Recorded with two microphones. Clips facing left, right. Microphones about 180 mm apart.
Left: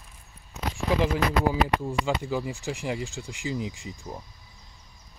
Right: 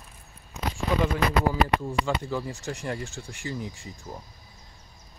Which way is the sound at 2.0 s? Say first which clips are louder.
Left 1 dB; 10° left (ahead or behind).